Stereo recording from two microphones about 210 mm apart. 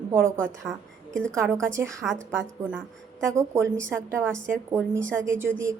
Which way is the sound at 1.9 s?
Centre (ahead or behind).